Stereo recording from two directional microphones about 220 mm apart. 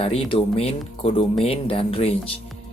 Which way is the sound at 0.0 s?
25° left (ahead or behind).